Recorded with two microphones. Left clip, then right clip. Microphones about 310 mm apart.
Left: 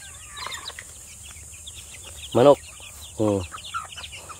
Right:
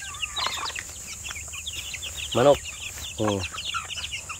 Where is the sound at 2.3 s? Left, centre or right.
Left.